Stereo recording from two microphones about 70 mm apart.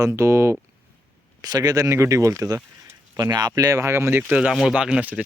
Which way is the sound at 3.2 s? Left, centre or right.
Right.